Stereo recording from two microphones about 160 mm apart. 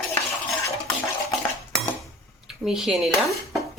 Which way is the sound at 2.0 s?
Centre (ahead or behind).